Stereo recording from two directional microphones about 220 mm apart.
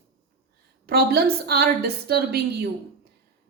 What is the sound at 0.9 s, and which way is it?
A woman's voice, 45° right (ahead or behind).